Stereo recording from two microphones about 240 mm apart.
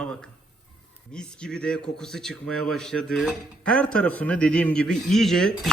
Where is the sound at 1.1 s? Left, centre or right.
Centre.